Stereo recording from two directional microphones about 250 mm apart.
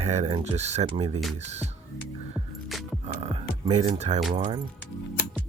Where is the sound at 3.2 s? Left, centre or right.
Right.